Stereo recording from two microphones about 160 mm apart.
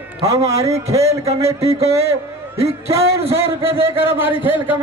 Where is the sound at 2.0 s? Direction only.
15° right (ahead or behind).